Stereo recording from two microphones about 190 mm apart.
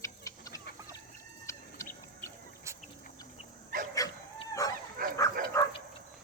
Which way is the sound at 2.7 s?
15° right (ahead or behind).